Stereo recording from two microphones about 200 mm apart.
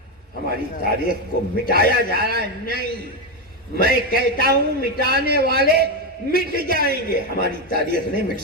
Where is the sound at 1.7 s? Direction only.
50° right (ahead or behind).